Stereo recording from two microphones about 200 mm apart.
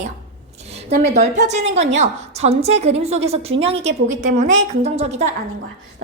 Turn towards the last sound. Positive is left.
turn(degrees=-35)  # may be behind; listen again after turning